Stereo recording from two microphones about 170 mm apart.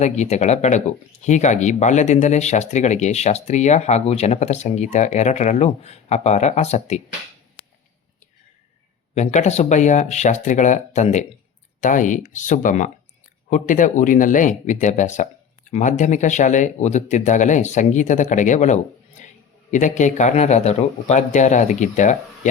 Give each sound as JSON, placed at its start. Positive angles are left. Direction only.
{"t": 0.0, "sound": "speech", "side_deg": 40}
{"t": 9.1, "sound": "speech", "side_deg": 45}